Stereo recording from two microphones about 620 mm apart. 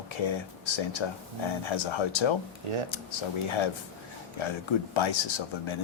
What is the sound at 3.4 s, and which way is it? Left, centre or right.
Speech, left.